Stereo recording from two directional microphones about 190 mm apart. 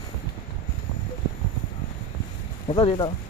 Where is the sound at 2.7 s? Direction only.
25° left (ahead or behind).